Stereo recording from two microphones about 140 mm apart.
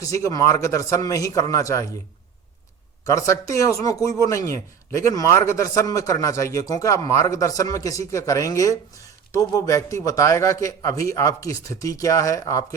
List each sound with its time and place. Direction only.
0.0 s a man's voice: 25° left (ahead or behind)
3.0 s a man's voice: 20° left (ahead or behind)